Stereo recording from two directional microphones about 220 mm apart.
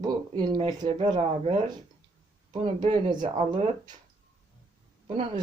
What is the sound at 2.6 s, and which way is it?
Speech, 20° right (ahead or behind).